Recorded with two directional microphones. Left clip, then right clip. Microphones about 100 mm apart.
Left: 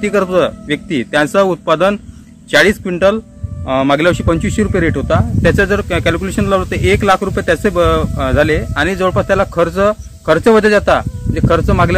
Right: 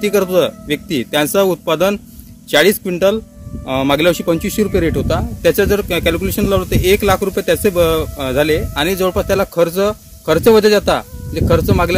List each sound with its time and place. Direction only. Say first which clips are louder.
0.0 s a man's voice: left 1 dB; 40° right (ahead or behind)